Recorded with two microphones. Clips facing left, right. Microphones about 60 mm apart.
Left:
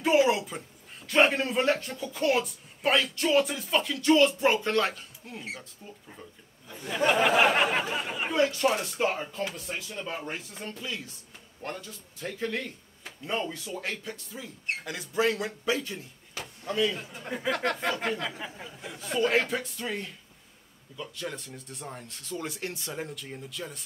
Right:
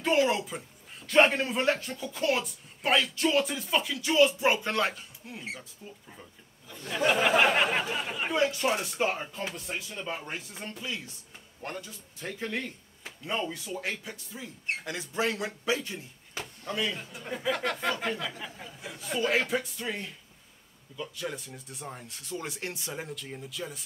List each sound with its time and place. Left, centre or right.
0.0 s a man's voice: centre; by 15.9 s right
16.9 s speech: centre
22.9 s speech: centre